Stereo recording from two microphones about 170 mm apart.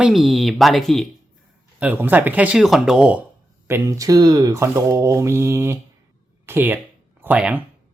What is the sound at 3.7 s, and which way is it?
Speech, 20° right (ahead or behind).